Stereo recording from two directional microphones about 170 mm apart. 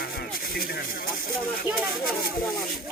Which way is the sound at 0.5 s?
65° left (ahead or behind).